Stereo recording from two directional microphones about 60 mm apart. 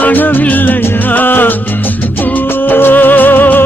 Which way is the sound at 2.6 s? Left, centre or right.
Left.